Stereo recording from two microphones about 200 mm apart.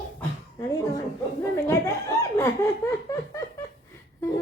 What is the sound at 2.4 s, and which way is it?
Laughter, 15° left (ahead or behind).